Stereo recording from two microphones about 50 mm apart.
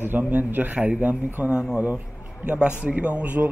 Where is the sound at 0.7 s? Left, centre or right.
Right.